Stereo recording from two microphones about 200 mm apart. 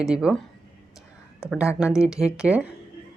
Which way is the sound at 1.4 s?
5° right (ahead or behind).